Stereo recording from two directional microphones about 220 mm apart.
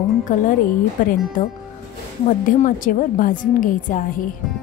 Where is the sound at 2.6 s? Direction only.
35° left (ahead or behind).